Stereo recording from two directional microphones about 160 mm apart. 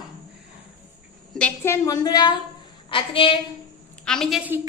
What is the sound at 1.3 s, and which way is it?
A woman's voice, 10° left (ahead or behind).